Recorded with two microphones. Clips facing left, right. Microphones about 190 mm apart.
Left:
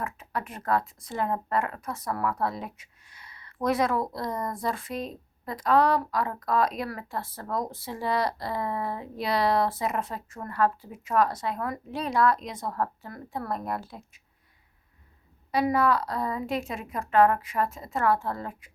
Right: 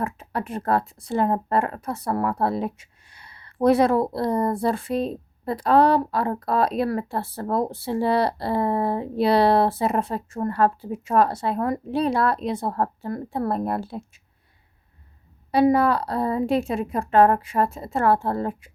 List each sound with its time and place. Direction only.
0.0 s speech: 30° right (ahead or behind)
15.5 s speech: 30° right (ahead or behind)